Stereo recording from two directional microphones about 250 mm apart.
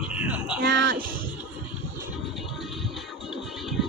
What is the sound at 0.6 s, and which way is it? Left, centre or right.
Speech, right.